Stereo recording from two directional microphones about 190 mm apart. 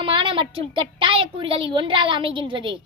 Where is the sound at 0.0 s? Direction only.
25° right (ahead or behind).